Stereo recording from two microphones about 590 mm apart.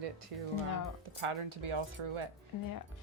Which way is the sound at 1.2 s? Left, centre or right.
Right.